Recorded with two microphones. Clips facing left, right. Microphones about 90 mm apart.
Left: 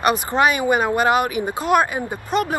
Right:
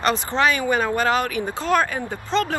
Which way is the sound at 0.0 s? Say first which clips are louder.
Left 3 dB; 15° left (ahead or behind).